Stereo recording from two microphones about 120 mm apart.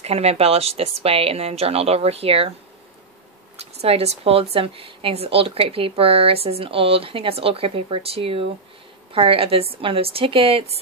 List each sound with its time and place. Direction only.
0.0 s speech: 60° right (ahead or behind)
3.8 s speech: 55° right (ahead or behind)